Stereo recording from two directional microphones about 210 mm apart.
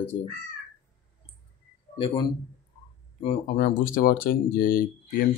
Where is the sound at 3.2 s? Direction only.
40° left (ahead or behind).